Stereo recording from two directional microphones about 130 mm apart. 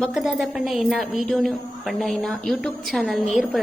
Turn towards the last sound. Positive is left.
turn(degrees=0)  # may be behind; listen again after turning